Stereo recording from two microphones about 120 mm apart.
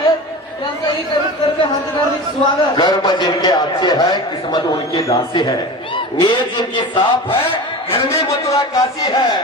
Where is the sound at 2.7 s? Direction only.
35° left (ahead or behind).